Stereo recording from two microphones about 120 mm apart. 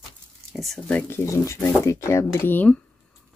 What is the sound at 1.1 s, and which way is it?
Speech, 25° left (ahead or behind).